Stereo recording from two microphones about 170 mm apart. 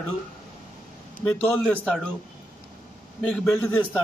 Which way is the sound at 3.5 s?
10° left (ahead or behind).